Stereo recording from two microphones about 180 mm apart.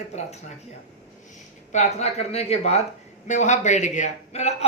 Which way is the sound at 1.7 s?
40° left (ahead or behind).